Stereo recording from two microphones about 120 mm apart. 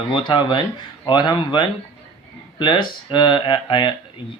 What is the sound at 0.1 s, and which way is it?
Speech, 40° left (ahead or behind).